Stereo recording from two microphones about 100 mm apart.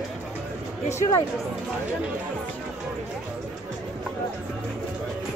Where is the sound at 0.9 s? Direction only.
30° left (ahead or behind).